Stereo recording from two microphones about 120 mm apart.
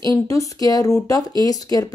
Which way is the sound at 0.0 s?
30° left (ahead or behind).